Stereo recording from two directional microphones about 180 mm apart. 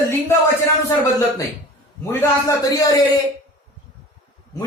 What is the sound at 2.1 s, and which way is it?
Speech, 15° left (ahead or behind).